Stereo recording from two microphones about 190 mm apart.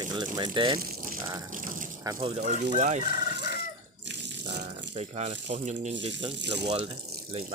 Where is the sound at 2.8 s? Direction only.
40° right (ahead or behind).